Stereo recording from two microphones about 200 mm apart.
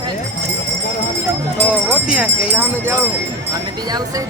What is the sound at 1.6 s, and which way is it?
Speech, 5° right (ahead or behind).